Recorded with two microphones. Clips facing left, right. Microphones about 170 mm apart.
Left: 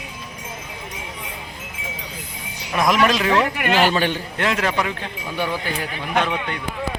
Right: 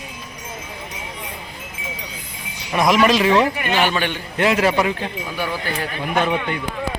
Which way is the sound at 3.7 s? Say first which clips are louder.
Left 3 dB; 40° left (ahead or behind).